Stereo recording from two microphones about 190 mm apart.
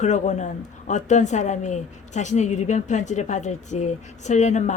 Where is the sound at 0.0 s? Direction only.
40° left (ahead or behind).